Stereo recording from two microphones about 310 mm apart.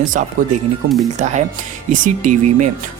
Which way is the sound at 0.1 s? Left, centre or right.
Right.